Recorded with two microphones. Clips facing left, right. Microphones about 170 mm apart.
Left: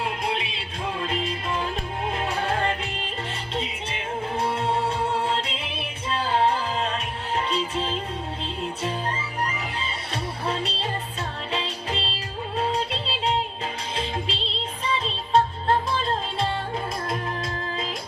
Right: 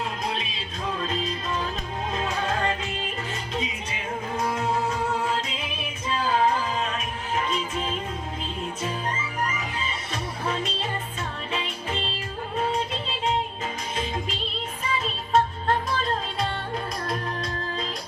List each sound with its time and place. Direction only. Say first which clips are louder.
2.2 s music: left 1 dB; 30° left (ahead or behind)
10.1 s music: left 2 dB; 35° left (ahead or behind)